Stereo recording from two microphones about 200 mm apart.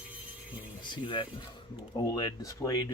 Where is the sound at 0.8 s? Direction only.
25° left (ahead or behind).